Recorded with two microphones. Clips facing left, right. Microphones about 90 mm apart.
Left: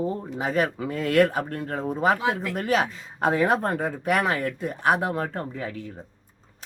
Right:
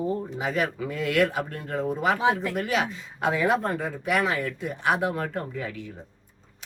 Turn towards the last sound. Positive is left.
turn(degrees=30)  # may be behind; listen again after turning